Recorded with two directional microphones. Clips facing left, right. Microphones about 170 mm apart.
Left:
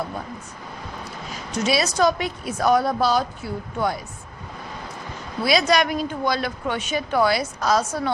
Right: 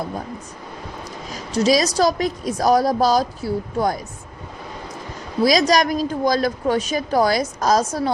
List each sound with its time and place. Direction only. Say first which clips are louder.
1.3 s a woman's voice: right 6 dB; 35° right (ahead or behind)
5.4 s a woman's voice: right 3 dB; 40° right (ahead or behind)